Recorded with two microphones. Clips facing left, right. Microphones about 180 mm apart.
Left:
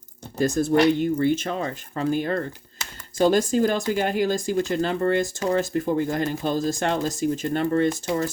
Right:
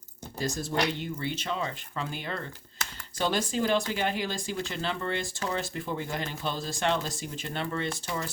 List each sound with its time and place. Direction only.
0.3 s speech: 50° left (ahead or behind)